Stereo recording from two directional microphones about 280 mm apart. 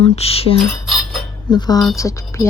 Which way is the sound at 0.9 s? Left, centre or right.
Centre.